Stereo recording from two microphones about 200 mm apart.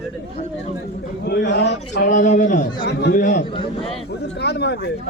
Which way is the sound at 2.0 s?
40° left (ahead or behind).